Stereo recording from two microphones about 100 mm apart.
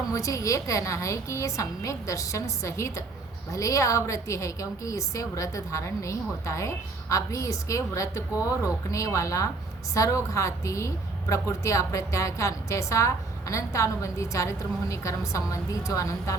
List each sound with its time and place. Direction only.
0.1 s a woman's voice: 35° left (ahead or behind)